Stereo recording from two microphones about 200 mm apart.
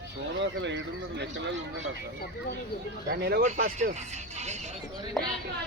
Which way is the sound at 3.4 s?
40° right (ahead or behind).